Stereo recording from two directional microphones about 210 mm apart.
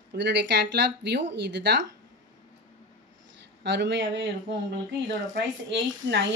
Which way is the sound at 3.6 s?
55° right (ahead or behind).